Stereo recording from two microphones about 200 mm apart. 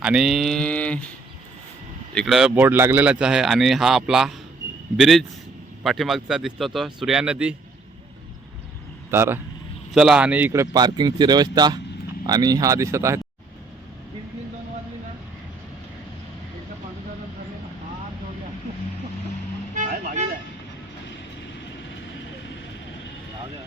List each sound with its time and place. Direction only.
0.0 s a man's voice: 5° right (ahead or behind)
2.1 s a man's voice: centre (ahead or behind)
9.0 s speech: 10° right (ahead or behind)
19.7 s vehicle: 40° right (ahead or behind)